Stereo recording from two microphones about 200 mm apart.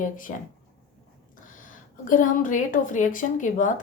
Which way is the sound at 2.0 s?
40° left (ahead or behind).